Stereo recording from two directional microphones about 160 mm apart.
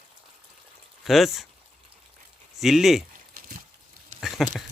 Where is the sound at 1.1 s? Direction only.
Centre (ahead or behind).